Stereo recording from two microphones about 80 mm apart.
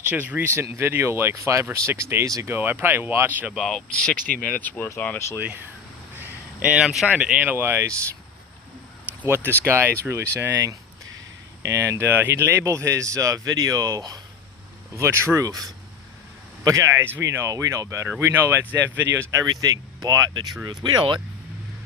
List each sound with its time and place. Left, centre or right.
0.1 s speech: right
2.5 s speech: right
3.5 s speech: centre; by 5.2 s left
5.4 s speech: right
6.6 s speech: centre
7.1 s speech: centre
9.2 s speech: right
12.6 s speech: right
14.9 s speech: right
16.6 s speech: right
18.2 s speech: right
19.3 s speech: right